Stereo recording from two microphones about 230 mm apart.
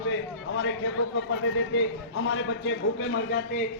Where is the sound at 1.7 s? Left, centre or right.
Left.